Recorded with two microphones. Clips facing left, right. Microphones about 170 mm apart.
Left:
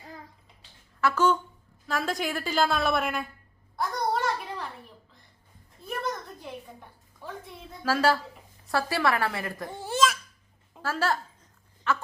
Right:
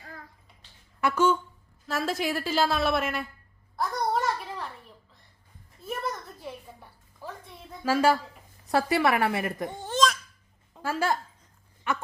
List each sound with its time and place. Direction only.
1.0 s a woman's voice: 10° right (ahead or behind)
3.8 s a sound: centre (ahead or behind)
5.8 s a sound: centre (ahead or behind)
7.9 s a woman's voice: 10° right (ahead or behind)
9.7 s laughter: 5° left (ahead or behind)
10.8 s speech: 15° right (ahead or behind)